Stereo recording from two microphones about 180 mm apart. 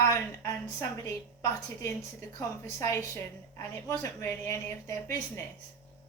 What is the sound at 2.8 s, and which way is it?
Speech, 15° left (ahead or behind).